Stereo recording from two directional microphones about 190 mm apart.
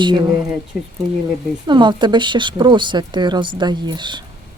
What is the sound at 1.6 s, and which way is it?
Speech, 25° right (ahead or behind).